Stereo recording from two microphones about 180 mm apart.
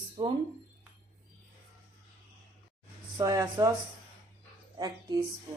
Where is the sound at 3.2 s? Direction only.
20° right (ahead or behind).